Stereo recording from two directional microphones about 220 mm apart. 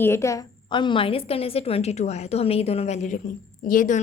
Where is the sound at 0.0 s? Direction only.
10° left (ahead or behind).